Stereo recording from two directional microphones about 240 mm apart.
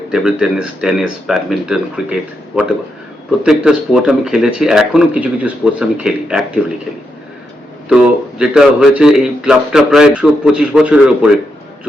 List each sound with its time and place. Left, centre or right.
0.1 s a man's voice: centre
7.9 s a man's voice: centre